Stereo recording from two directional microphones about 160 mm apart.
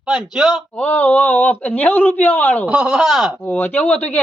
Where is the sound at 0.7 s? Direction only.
10° left (ahead or behind).